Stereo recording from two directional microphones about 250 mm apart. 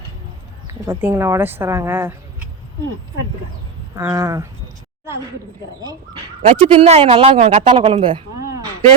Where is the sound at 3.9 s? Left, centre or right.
Centre.